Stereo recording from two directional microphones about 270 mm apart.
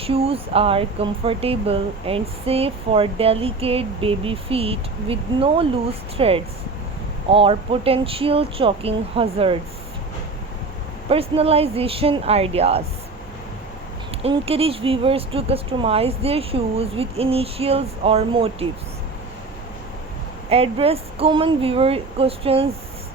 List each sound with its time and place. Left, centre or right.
0.0 s speech: right
11.1 s speech: right
14.2 s speech: right
20.5 s speech: right